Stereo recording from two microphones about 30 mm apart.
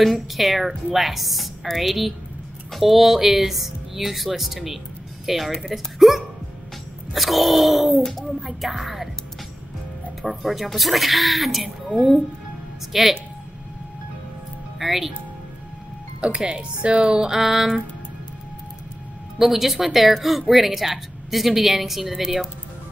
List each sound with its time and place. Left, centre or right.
0.0 s speech: centre
8.0 s speech: centre
8.4 s speech: centre
10.4 s speech: centre
12.9 s music: centre
14.8 s music: centre
16.8 s speech: right
17.3 s music: centre
19.3 s speech: centre